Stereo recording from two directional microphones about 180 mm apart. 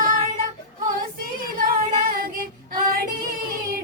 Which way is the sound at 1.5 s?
50° right (ahead or behind).